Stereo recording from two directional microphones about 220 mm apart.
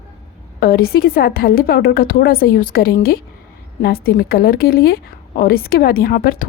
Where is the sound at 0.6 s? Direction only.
45° left (ahead or behind).